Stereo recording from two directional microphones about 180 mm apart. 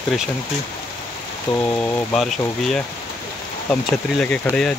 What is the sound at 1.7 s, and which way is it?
Speech, 10° left (ahead or behind).